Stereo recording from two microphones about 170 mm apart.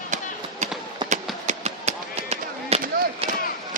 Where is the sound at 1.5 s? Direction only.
40° right (ahead or behind).